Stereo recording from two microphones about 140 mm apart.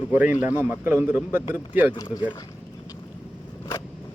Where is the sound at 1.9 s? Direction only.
30° left (ahead or behind).